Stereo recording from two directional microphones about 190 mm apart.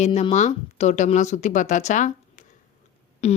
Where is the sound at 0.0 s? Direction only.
35° left (ahead or behind).